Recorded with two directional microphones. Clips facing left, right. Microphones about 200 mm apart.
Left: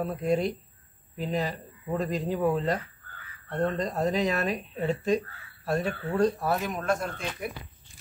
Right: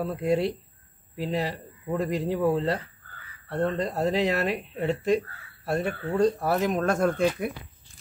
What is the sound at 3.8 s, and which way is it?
Speech, 30° right (ahead or behind).